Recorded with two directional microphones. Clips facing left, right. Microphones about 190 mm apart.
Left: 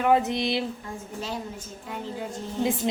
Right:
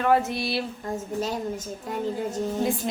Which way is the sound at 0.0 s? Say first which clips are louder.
Even; 20° left (ahead or behind).